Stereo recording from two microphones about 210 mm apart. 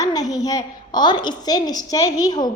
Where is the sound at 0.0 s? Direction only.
15° left (ahead or behind).